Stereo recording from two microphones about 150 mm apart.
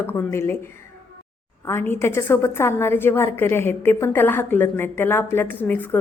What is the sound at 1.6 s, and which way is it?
A woman's voice, 15° left (ahead or behind).